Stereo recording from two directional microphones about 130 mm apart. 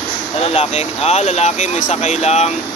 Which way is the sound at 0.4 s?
55° left (ahead or behind).